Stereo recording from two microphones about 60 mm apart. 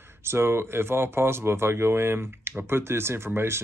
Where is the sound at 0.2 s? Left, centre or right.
Right.